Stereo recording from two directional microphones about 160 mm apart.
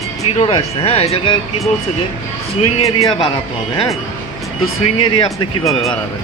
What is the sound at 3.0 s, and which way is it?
Speech, 30° left (ahead or behind).